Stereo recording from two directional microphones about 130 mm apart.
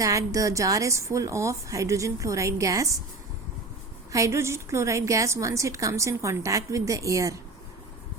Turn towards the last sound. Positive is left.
turn(degrees=-25)  # may be behind; listen again after turning